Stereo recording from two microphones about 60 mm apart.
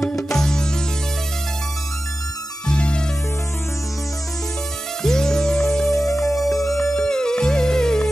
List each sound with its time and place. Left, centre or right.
0.3 s music: centre
2.6 s music: centre
5.0 s music: centre
5.9 s music: left
6.2 s music: centre